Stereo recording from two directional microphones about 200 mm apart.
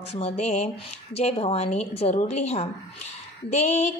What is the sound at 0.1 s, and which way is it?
Music, 30° left (ahead or behind).